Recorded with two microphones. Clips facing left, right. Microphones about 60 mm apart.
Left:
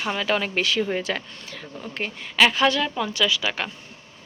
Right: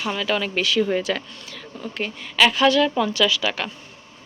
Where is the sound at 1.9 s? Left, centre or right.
Left.